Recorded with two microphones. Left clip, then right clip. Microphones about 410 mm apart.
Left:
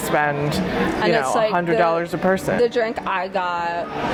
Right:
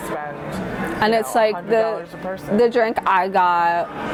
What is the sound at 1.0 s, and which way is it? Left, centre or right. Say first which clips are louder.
Speech: right 3 dB; right.